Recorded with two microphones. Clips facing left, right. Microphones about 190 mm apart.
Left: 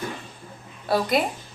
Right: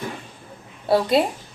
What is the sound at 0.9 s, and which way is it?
Speech, 30° right (ahead or behind).